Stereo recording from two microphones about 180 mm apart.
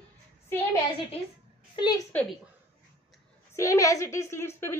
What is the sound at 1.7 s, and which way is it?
Speech, 25° left (ahead or behind).